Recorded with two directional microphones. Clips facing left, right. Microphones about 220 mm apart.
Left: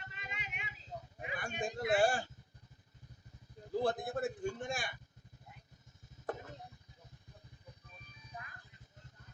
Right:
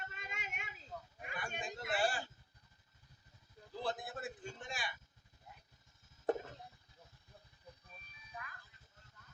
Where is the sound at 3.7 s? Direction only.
50° left (ahead or behind).